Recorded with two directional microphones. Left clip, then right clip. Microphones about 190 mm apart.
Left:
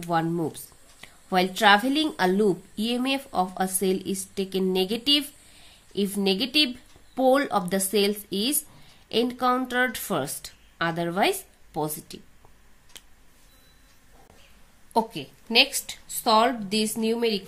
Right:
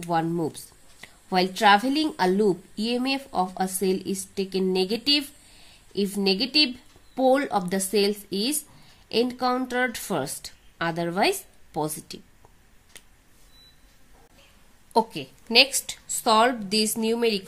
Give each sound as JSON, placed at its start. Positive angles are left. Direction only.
{"t": 0.0, "sound": "speech", "side_deg": -5}
{"t": 12.9, "sound": "a sound", "side_deg": -5}
{"t": 14.9, "sound": "a woman's voice", "side_deg": -20}